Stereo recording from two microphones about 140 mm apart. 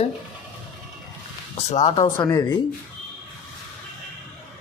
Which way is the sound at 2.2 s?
30° left (ahead or behind).